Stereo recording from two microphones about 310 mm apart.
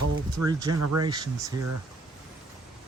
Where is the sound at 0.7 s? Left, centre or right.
Right.